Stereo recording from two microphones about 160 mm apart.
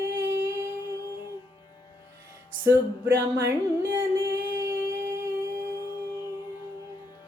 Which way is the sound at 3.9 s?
15° right (ahead or behind).